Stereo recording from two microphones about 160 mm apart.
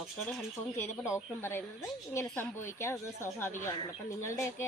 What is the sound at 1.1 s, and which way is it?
Speech, 15° left (ahead or behind).